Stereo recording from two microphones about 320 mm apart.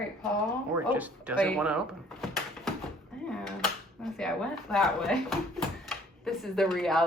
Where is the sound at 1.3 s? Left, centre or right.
Centre.